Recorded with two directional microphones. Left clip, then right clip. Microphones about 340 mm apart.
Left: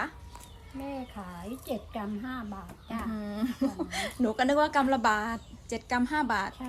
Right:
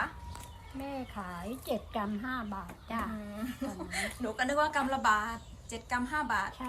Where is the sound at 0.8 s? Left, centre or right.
Centre.